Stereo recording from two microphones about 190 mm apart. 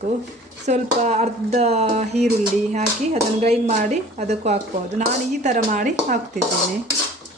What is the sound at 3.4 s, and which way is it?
A woman's voice, 35° right (ahead or behind).